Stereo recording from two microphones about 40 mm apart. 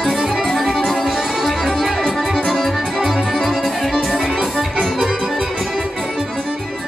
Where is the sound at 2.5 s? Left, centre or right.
Centre.